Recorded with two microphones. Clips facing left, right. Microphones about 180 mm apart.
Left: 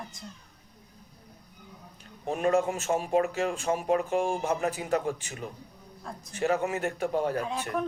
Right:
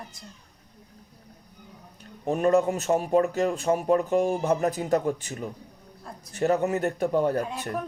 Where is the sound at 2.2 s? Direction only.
40° right (ahead or behind).